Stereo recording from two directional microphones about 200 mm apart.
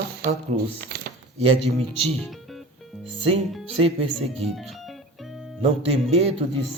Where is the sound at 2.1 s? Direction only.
Centre (ahead or behind).